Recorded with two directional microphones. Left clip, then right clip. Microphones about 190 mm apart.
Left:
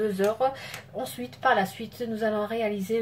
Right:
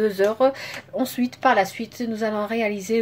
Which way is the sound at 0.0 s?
50° right (ahead or behind).